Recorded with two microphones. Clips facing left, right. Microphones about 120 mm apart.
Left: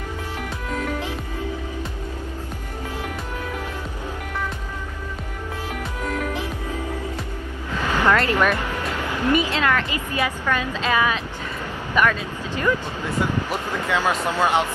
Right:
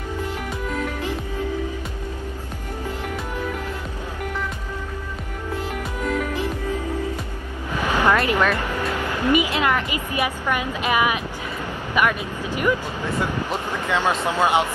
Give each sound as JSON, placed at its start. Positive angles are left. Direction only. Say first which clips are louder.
{"t": 7.8, "sound": "vehicle", "louder": "even", "side_deg": -15}
{"t": 9.2, "sound": "a woman's voice", "louder": "even", "side_deg": -15}
{"t": 14.0, "sound": "a woman's voice", "louder": "right 2 dB", "side_deg": -10}